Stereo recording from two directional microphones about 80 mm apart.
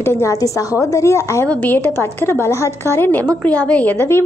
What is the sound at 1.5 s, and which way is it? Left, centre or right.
Speech, left.